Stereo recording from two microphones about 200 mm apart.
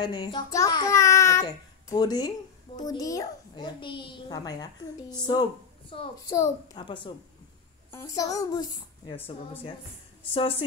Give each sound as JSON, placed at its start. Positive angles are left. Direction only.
{"t": 0.0, "sound": "child singing", "side_deg": 20}
{"t": 5.2, "sound": "a woman's voice", "side_deg": 20}
{"t": 10.3, "sound": "a woman's voice", "side_deg": 25}